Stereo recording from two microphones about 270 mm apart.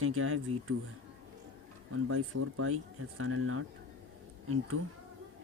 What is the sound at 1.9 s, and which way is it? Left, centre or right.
Speech, right.